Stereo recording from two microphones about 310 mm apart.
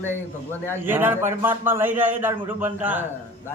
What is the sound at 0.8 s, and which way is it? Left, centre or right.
A man's voice, centre.